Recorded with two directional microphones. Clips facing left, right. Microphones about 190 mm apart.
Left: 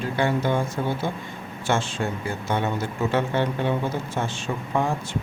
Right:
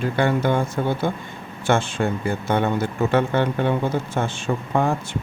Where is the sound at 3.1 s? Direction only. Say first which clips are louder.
Right 3 dB; 55° right (ahead or behind).